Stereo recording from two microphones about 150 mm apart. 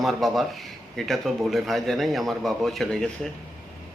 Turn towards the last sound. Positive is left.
turn(degrees=5)  # may be behind; listen again after turning